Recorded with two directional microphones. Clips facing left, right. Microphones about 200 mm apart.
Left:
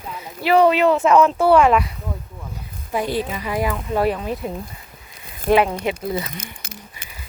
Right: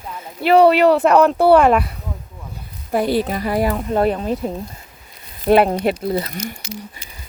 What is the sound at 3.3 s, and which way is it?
Speech, 40° right (ahead or behind).